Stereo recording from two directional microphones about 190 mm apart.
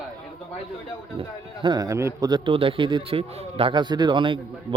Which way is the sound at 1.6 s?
20° right (ahead or behind).